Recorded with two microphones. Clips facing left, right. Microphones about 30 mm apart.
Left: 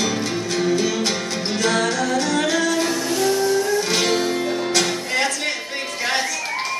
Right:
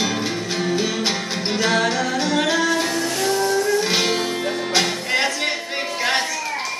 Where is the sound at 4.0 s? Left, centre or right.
Centre.